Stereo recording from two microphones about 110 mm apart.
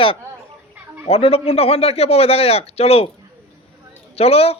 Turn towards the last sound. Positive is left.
turn(degrees=65)  # may be behind; listen again after turning